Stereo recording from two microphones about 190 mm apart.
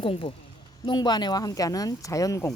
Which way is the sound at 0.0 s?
30° left (ahead or behind).